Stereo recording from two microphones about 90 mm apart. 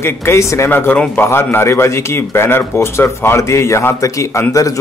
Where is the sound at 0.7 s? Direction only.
20° left (ahead or behind).